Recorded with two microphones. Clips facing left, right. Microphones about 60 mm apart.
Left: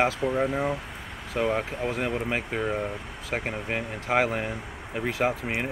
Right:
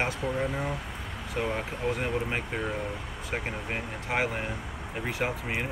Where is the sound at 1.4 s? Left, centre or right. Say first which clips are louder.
Left 5 dB; left.